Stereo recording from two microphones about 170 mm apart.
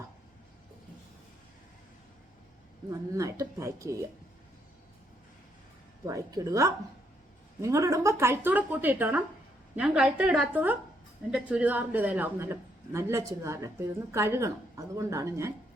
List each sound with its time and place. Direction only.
2.9 s speech: 20° right (ahead or behind)
6.1 s a woman's voice: 20° right (ahead or behind)